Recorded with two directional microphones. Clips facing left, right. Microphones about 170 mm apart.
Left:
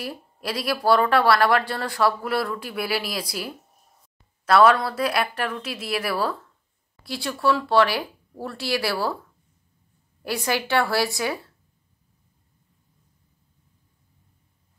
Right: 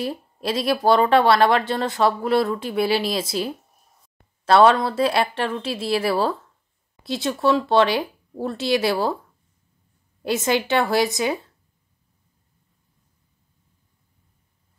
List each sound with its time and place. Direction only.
0.0 s a woman's voice: 25° right (ahead or behind)
10.2 s a woman's voice: 20° right (ahead or behind)